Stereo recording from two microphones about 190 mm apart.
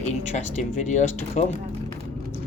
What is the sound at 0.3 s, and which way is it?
Speech, 40° left (ahead or behind).